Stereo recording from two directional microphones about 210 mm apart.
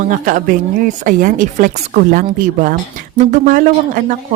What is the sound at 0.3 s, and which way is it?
A woman's voice, 40° right (ahead or behind).